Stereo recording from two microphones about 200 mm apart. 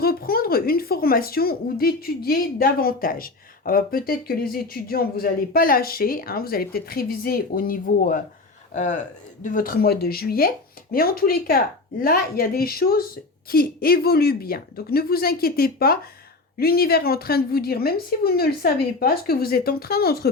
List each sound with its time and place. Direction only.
0.0 s speech: 50° left (ahead or behind)